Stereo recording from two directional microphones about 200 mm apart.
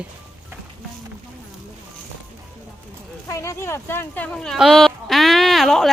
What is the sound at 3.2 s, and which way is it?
Speech, 15° left (ahead or behind).